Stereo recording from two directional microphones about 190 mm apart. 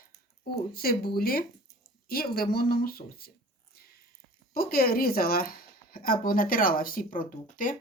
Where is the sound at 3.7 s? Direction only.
50° left (ahead or behind).